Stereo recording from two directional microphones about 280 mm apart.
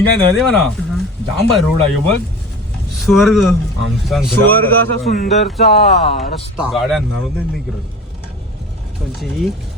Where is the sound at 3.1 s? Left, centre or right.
Centre.